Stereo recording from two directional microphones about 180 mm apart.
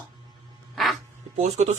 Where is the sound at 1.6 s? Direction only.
40° right (ahead or behind).